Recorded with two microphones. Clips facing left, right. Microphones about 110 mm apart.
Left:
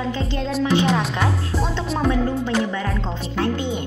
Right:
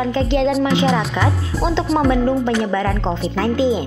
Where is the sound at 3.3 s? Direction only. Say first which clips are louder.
Right 5 dB; 90° right.